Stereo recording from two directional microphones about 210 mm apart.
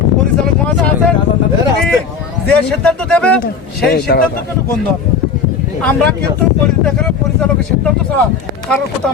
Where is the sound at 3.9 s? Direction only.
50° left (ahead or behind).